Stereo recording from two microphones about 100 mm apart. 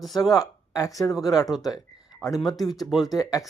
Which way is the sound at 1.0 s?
25° left (ahead or behind).